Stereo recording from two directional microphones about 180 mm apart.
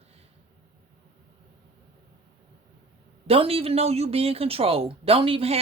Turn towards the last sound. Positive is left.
turn(degrees=-30)  # may be behind; listen again after turning